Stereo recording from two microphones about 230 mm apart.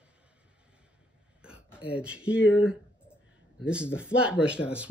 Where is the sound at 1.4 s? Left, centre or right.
Centre.